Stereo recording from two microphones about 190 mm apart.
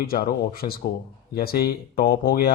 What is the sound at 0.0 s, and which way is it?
Speech, 50° left (ahead or behind).